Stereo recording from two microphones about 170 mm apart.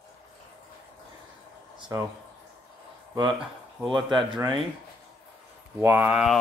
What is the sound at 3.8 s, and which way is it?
Speech, centre (ahead or behind).